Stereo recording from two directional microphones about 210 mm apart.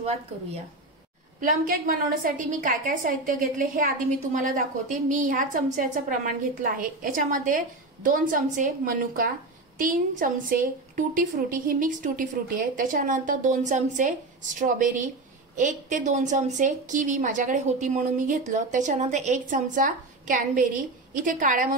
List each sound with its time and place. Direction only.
1.4 s a woman's voice: 40° right (ahead or behind)